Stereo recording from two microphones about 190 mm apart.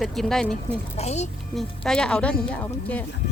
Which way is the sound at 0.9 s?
35° left (ahead or behind).